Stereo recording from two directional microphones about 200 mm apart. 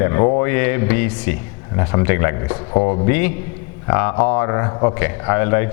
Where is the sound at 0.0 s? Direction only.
20° left (ahead or behind).